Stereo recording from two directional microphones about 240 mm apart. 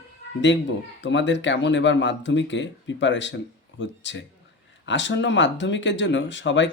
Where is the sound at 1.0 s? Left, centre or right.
Left.